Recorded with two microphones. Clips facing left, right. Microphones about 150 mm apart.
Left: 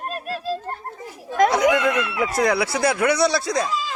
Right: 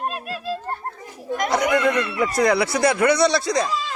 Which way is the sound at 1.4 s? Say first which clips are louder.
Even; centre (ahead or behind).